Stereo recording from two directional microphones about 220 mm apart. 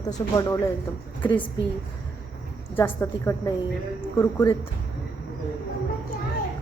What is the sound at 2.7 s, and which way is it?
A woman's voice, 10° left (ahead or behind).